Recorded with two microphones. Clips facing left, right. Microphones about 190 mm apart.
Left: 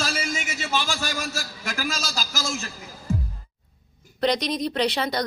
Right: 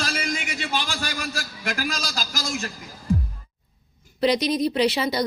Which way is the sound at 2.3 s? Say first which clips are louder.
Right 1 dB; 45° right (ahead or behind).